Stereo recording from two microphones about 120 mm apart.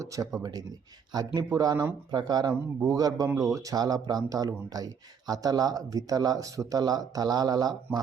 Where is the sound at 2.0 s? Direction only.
35° right (ahead or behind).